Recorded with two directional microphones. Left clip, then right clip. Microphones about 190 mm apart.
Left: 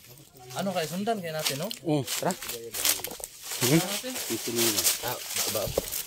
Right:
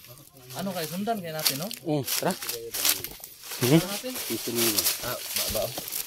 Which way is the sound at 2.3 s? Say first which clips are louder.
Right 2 dB; 35° right (ahead or behind).